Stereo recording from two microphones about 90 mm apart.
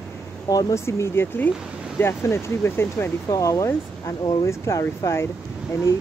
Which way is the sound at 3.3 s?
40° left (ahead or behind).